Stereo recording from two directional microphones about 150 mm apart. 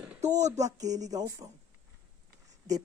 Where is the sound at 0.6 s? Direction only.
25° right (ahead or behind).